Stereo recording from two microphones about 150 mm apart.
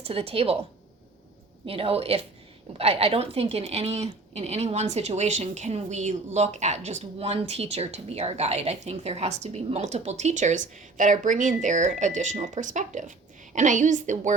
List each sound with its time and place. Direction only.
0.0 s a woman's voice: 40° right (ahead or behind)
1.6 s a woman's voice: 40° right (ahead or behind); by 14.3 s 55° right (ahead or behind)